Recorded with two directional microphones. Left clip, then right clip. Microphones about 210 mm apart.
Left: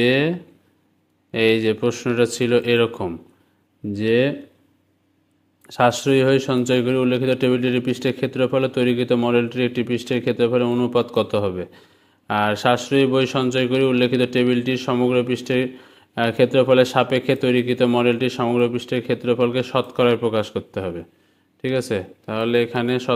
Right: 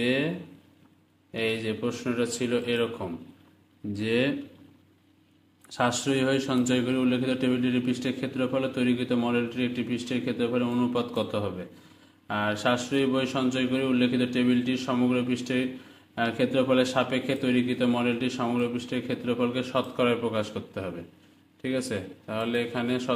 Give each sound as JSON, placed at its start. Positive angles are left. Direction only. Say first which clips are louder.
{"t": 0.0, "sound": "speech", "louder": "left 9 dB", "side_deg": 45}
{"t": 1.3, "sound": "speech", "louder": "left 11 dB", "side_deg": 45}
{"t": 5.7, "sound": "speech", "louder": "left 9 dB", "side_deg": 35}